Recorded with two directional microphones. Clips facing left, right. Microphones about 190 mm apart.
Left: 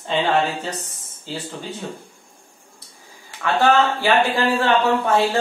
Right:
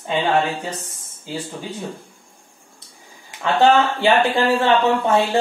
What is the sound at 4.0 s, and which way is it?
Speech, 25° right (ahead or behind).